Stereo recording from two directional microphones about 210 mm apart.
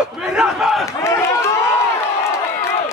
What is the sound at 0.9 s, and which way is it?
Run, 15° left (ahead or behind).